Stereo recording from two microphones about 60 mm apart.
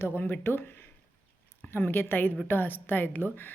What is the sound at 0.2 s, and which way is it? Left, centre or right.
Speech, left.